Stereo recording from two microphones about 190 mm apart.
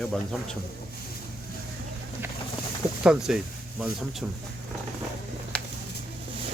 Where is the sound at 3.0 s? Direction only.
5° right (ahead or behind).